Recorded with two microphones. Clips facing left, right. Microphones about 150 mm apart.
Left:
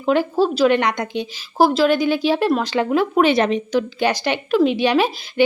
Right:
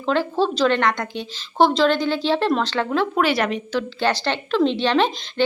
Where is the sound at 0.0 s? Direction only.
15° left (ahead or behind).